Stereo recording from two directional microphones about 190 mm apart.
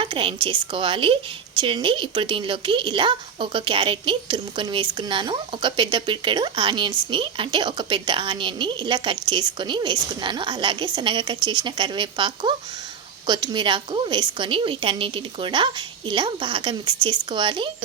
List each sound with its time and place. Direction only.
0.0 s a woman's voice: 25° right (ahead or behind)